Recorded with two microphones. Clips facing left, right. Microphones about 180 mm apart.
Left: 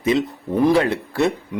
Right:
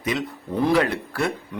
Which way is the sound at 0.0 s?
25° left (ahead or behind).